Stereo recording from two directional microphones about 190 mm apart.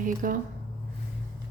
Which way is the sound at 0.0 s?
45° right (ahead or behind).